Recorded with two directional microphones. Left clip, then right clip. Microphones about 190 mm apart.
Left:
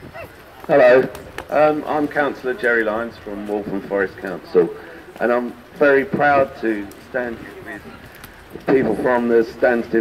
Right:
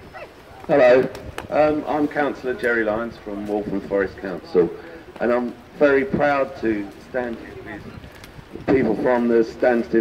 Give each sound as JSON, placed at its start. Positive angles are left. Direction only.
{"t": 0.7, "sound": "a man's voice", "side_deg": 0}
{"t": 8.6, "sound": "a man's voice", "side_deg": 0}